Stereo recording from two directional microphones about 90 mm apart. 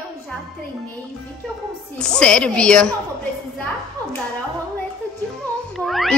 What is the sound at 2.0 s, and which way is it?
Speech, 10° left (ahead or behind).